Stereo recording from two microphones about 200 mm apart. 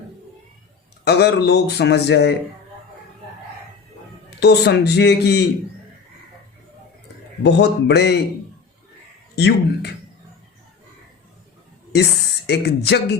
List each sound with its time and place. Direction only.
1.0 s speech: 55° left (ahead or behind)
4.4 s speech: 55° left (ahead or behind)
7.4 s speech: 55° left (ahead or behind)
9.3 s speech: 55° left (ahead or behind)
12.5 s speech: 55° left (ahead or behind)